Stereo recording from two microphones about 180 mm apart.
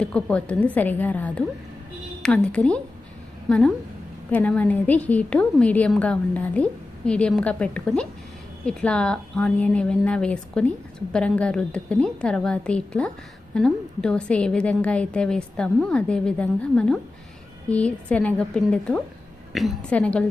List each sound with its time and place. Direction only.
0.0 s a woman's voice: 5° left (ahead or behind)
4.3 s a woman's voice: 5° left (ahead or behind)